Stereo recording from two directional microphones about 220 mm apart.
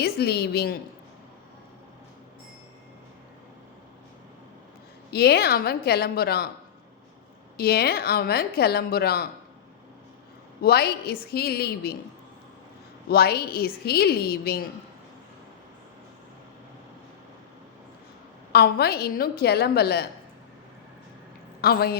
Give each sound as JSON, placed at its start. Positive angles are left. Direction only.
{"t": 0.0, "sound": "a woman's voice", "side_deg": 45}
{"t": 5.1, "sound": "a woman's voice", "side_deg": 45}
{"t": 7.5, "sound": "a woman's voice", "side_deg": 45}
{"t": 10.6, "sound": "a woman's voice", "side_deg": 45}
{"t": 13.1, "sound": "a woman's voice", "side_deg": 45}
{"t": 18.5, "sound": "a woman's voice", "side_deg": 45}
{"t": 21.6, "sound": "a woman's voice", "side_deg": 45}